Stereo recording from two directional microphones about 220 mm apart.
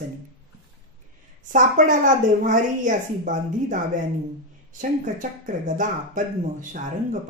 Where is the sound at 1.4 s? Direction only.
35° right (ahead or behind).